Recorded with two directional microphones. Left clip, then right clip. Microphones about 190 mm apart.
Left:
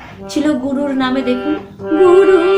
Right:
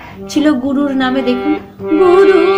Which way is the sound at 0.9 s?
45° right (ahead or behind).